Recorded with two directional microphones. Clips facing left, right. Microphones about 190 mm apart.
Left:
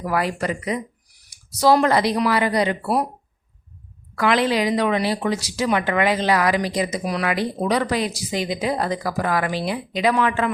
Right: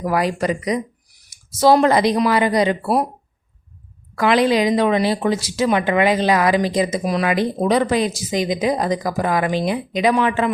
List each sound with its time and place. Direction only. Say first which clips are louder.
0.0 s a woman's voice: right 3 dB; 20° right (ahead or behind)
4.1 s a woman's voice: right 4 dB; 20° right (ahead or behind)